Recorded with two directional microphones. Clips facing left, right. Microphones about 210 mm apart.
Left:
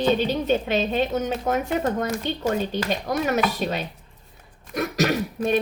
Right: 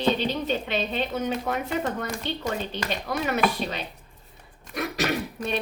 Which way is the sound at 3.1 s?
45° left (ahead or behind).